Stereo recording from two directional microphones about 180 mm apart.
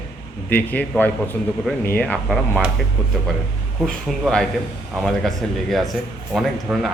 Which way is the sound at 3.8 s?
5° left (ahead or behind).